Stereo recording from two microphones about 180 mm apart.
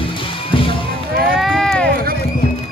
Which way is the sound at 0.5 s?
30° left (ahead or behind).